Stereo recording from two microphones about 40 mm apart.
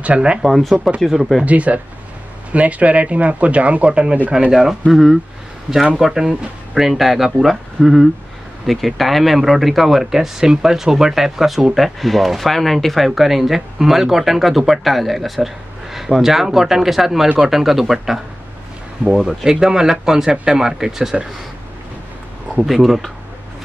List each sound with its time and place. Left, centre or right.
0.0 s speech: right
0.5 s speech: centre
1.4 s speech: right
4.5 s speech: centre
22.7 s speech: centre